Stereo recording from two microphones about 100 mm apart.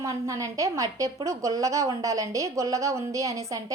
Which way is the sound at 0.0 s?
35° right (ahead or behind).